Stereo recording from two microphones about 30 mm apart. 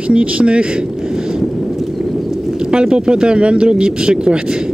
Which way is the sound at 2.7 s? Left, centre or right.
Right.